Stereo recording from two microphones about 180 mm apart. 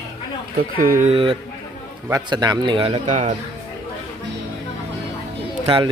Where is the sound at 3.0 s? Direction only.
40° right (ahead or behind).